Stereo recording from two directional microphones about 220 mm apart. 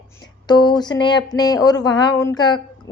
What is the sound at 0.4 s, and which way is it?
A woman's voice, 20° left (ahead or behind).